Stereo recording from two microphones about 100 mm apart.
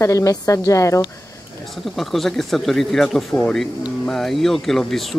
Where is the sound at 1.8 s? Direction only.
Centre (ahead or behind).